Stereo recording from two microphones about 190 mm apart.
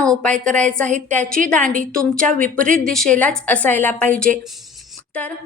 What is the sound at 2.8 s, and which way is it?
A woman's voice, centre (ahead or behind).